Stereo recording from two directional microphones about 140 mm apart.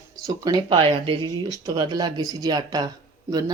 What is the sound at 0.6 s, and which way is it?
Speech, 40° right (ahead or behind).